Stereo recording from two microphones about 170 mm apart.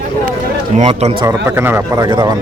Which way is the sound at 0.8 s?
40° right (ahead or behind).